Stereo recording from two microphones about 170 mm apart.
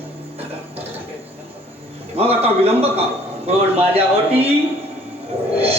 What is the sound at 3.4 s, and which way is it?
A man's voice, 35° right (ahead or behind).